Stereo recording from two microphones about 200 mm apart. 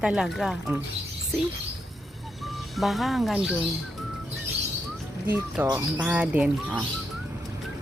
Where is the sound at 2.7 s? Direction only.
Centre (ahead or behind).